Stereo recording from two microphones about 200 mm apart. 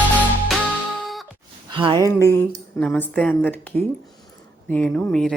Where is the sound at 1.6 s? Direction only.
25° right (ahead or behind).